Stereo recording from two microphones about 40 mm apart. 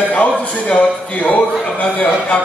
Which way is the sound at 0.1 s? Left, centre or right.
Left.